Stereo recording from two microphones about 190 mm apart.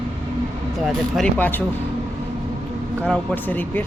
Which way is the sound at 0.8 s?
Centre (ahead or behind).